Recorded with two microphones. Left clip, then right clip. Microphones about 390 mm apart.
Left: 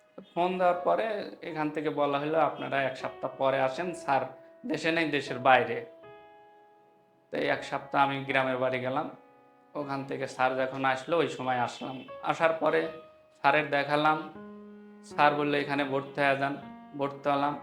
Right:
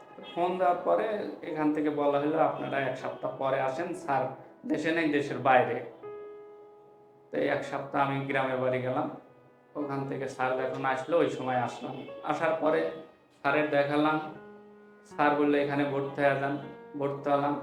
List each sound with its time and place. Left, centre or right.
0.3 s speech: left
7.3 s speech: left
9.9 s speech: left
15.1 s speech: left